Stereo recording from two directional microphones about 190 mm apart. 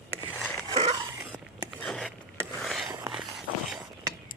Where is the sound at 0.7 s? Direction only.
35° right (ahead or behind).